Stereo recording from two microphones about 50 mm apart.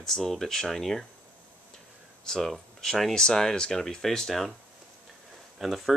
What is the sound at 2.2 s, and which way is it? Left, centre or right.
Speech, centre.